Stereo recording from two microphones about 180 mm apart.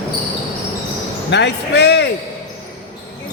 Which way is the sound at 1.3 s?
70° left (ahead or behind).